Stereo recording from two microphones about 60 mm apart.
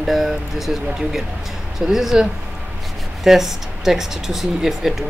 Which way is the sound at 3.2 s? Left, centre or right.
Centre.